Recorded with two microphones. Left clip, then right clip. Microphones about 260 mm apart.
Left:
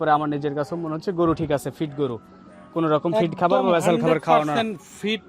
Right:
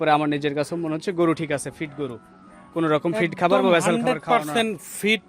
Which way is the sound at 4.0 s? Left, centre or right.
Left.